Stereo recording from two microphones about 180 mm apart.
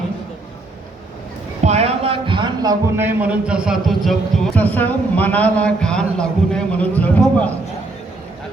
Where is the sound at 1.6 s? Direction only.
35° right (ahead or behind); by 7.5 s 10° left (ahead or behind).